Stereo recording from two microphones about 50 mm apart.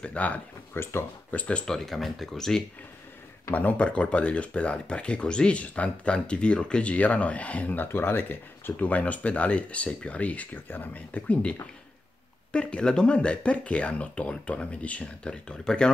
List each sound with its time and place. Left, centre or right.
0.0 s speech: left
0.8 s speech: left
1.3 s speech: left
1.7 s speech: centre
3.5 s speech: left
7.7 s speech: left
12.5 s speech: centre